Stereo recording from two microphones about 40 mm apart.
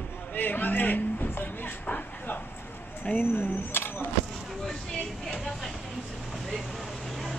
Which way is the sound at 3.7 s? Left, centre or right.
Left.